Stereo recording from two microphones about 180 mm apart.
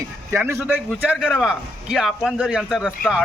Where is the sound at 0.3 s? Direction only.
15° right (ahead or behind).